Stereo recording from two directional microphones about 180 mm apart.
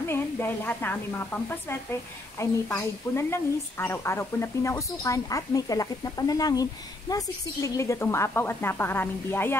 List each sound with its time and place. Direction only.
0.0 s a woman's voice: 15° left (ahead or behind)